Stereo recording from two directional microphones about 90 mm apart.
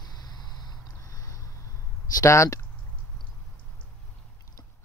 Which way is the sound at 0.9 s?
40° left (ahead or behind).